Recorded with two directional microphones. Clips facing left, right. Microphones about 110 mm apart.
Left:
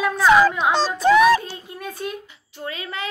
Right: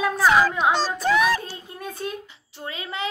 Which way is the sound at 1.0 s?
80° left.